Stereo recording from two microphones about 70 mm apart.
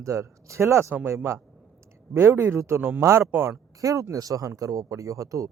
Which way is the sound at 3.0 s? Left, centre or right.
Right.